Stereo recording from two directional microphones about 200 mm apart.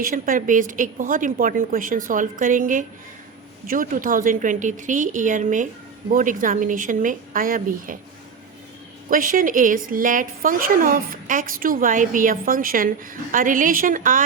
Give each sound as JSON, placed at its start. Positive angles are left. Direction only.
{"t": 0.0, "sound": "a woman's voice", "side_deg": -45}
{"t": 9.0, "sound": "a woman's voice", "side_deg": -45}